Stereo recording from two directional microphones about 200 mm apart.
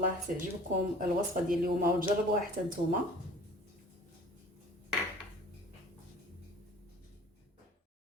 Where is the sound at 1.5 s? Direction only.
45° right (ahead or behind).